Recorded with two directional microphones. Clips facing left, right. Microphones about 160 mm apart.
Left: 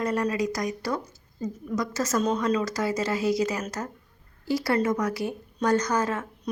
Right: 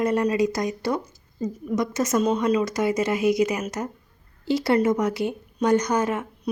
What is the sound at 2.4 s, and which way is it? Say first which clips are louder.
Speech: right 4 dB; 20° right (ahead or behind).